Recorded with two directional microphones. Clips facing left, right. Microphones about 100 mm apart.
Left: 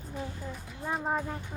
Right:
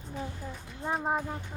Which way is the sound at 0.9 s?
10° right (ahead or behind).